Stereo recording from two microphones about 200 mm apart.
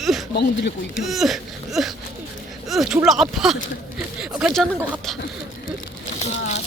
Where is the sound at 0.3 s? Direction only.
55° left (ahead or behind).